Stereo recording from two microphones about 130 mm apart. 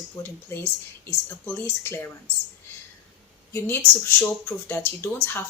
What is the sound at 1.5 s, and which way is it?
Speech, 15° left (ahead or behind).